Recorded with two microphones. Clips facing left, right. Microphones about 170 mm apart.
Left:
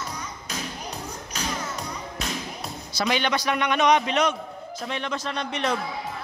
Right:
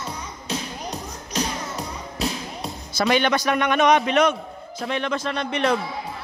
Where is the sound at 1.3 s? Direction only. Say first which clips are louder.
Right 4 dB; 35° right (ahead or behind).